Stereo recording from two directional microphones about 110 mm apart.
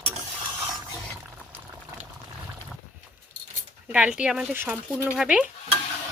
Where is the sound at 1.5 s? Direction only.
15° right (ahead or behind).